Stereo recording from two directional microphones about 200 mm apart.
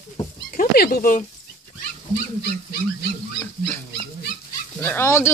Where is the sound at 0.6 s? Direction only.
50° left (ahead or behind).